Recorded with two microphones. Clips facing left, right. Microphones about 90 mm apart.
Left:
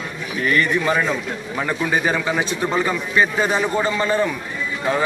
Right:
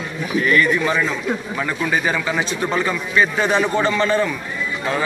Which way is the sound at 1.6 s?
20° left (ahead or behind).